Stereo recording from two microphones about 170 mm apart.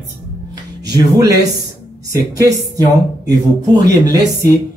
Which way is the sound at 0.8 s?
20° right (ahead or behind).